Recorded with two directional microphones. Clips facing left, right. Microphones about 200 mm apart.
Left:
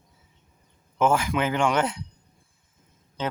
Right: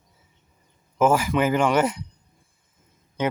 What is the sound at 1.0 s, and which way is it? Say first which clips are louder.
Speech: right 3 dB; 5° right (ahead or behind).